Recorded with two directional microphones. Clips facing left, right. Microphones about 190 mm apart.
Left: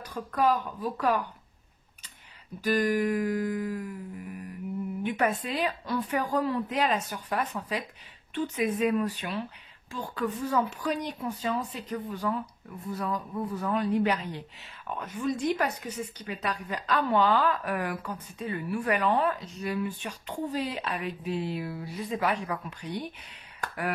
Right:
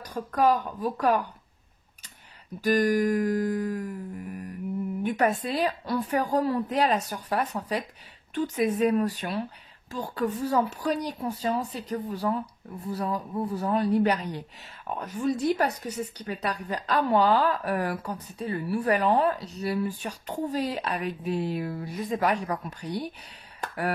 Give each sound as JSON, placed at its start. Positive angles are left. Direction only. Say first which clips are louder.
{"t": 0.0, "sound": "speech", "louder": "right 3 dB", "side_deg": -40}
{"t": 2.6, "sound": "speech", "louder": "right 3 dB", "side_deg": -40}
{"t": 5.0, "sound": "speech", "louder": "right 3 dB", "side_deg": -40}